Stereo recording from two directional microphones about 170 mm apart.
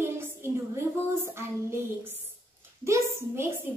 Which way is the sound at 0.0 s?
15° right (ahead or behind).